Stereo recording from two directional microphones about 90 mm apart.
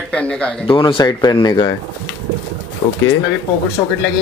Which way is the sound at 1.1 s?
50° left (ahead or behind).